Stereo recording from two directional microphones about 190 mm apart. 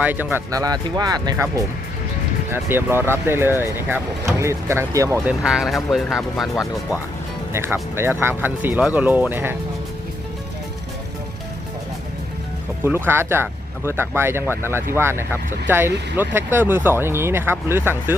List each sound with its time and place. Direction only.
0.0 s speech: 10° right (ahead or behind)
7.5 s speech: 15° right (ahead or behind)
12.8 s speech: 10° right (ahead or behind)